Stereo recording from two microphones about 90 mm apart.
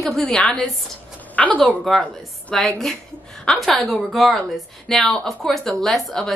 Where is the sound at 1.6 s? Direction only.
Centre (ahead or behind).